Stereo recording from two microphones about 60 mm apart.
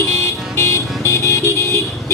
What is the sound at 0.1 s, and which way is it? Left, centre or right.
Vehicle, left.